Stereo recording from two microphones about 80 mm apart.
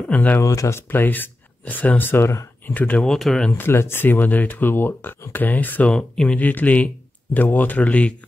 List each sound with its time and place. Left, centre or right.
0.1 s speech: centre
0.4 s speech: left
2.7 s speech: centre
3.1 s speech: centre
3.5 s speech: left